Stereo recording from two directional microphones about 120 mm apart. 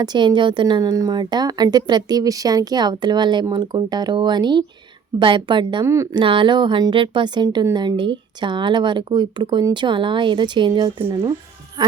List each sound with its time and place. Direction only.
0.0 s a woman's voice: 40° right (ahead or behind)
5.8 s speech: 25° right (ahead or behind)
6.1 s a woman's voice: 45° right (ahead or behind)
7.4 s a woman's voice: 30° right (ahead or behind)